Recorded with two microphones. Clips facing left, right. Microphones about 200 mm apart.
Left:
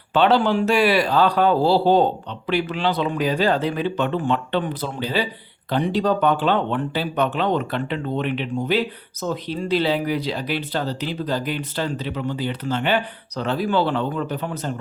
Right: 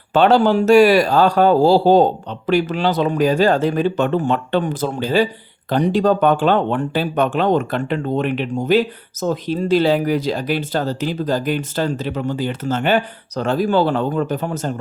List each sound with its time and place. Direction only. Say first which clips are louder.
0.1 s speech: right 4 dB; 45° right (ahead or behind)